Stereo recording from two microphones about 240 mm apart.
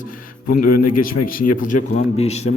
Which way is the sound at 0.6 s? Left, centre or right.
Left.